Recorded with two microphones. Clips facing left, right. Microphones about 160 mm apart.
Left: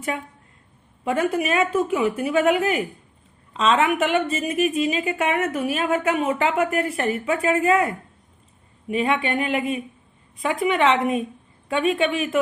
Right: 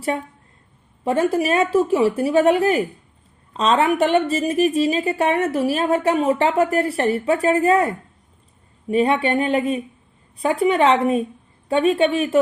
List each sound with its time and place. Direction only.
1.0 s a woman's voice: 35° right (ahead or behind)